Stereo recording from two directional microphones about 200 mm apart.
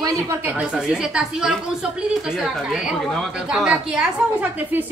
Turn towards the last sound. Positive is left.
turn(degrees=-5)  # may be behind; listen again after turning